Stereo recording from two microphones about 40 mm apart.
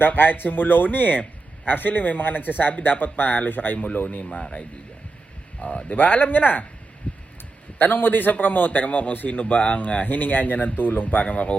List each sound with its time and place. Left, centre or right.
0.0 s a man's voice: left
5.5 s speech: left
6.0 s a man's voice: left
7.1 s heart sounds: left
7.8 s a man's voice: left